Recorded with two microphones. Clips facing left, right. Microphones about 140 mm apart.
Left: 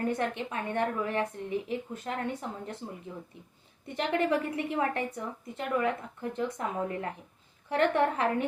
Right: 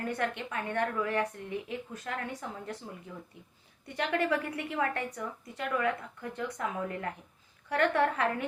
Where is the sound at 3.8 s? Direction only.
25° left (ahead or behind).